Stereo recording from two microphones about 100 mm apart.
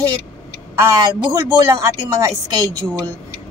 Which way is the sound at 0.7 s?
30° right (ahead or behind).